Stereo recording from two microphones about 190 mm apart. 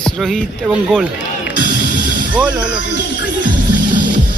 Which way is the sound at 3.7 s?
45° right (ahead or behind).